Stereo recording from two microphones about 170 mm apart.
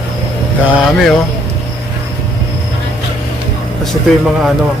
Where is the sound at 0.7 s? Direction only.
Centre (ahead or behind).